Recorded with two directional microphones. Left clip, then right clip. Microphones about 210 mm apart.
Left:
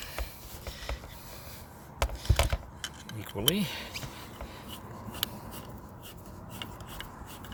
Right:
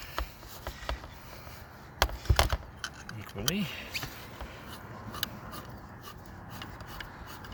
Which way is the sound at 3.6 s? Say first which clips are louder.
Left 2 dB; 40° left (ahead or behind).